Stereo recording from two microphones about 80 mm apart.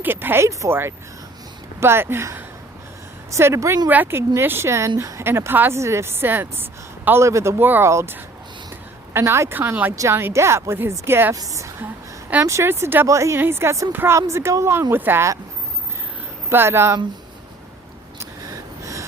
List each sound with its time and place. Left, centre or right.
0.0 s speech: right
3.8 s speech: right
7.6 s speech: right
9.6 s speech: right
9.9 s a woman's voice: right
10.2 s speech: right
16.5 s speech: right
18.2 s gasp: right